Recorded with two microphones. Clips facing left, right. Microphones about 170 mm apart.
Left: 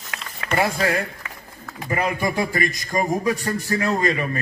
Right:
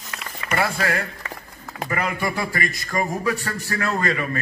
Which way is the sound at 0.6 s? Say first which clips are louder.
Left 2 dB; 20° left (ahead or behind).